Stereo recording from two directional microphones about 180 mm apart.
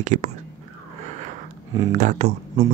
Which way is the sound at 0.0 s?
40° right (ahead or behind).